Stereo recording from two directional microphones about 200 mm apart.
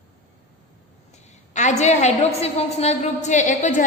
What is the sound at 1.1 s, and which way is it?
A woman's voice, 35° left (ahead or behind).